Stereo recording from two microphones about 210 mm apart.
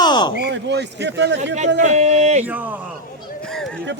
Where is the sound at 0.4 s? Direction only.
55° right (ahead or behind).